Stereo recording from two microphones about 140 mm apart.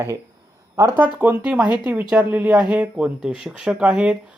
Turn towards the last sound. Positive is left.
turn(degrees=-10)  # may be behind; listen again after turning